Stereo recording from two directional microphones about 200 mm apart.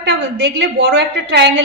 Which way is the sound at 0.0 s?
60° right (ahead or behind).